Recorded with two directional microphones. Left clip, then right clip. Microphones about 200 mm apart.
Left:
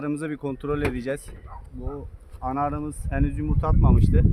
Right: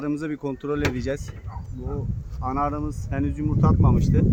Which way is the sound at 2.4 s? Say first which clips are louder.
Right 1 dB; 30° left (ahead or behind).